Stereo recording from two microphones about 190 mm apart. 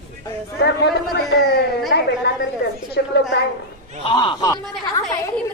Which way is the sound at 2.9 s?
60° left (ahead or behind).